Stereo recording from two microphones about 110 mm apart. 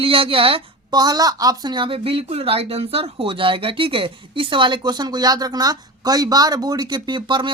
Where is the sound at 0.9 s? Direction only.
35° right (ahead or behind).